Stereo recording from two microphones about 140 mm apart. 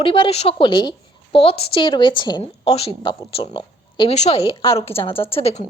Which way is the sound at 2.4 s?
45° left (ahead or behind).